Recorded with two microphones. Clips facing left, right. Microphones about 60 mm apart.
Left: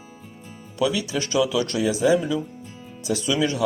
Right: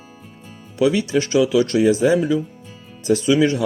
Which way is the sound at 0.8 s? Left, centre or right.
Right.